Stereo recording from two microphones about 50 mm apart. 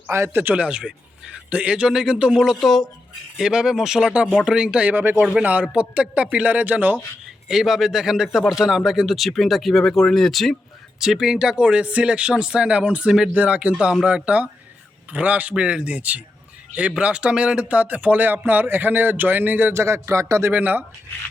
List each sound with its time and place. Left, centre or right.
0.1 s speech: right
0.5 s a man's voice: right
2.4 s speech: centre
3.3 s speech: centre
4.0 s a man's voice: right
7.4 s speech: centre
11.0 s speech: centre
11.3 s a man's voice: centre
13.1 s speech: centre
13.3 s a man's voice: right
15.5 s a man's voice: centre; by 19.7 s right
19.7 s speech: right
20.5 s speech: right